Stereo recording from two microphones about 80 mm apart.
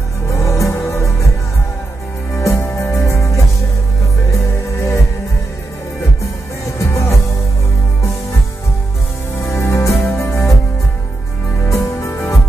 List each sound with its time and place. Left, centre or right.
0.3 s music: left
2.3 s music: left
6.8 s music: left
9.4 s music: left
11.6 s music: left